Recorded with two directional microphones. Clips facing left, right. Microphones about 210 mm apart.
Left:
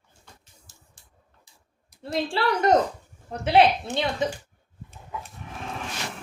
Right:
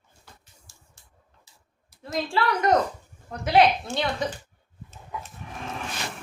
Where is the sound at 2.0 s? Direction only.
30° left (ahead or behind).